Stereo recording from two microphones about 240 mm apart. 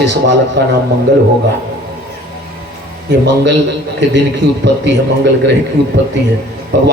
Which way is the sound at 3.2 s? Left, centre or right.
Right.